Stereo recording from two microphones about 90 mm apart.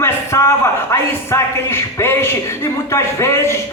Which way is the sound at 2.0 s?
30° left (ahead or behind).